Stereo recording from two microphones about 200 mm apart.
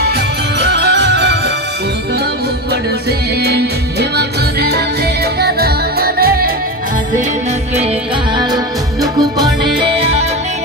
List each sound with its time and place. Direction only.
0.6 s music: 55° right (ahead or behind)
2.7 s music: 55° right (ahead or behind)
9.0 s music: 20° right (ahead or behind)